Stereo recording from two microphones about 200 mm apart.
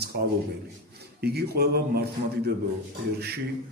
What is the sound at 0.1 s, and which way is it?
Speech, 50° right (ahead or behind).